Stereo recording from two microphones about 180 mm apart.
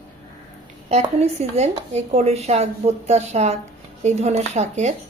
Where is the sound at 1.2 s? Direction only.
35° right (ahead or behind).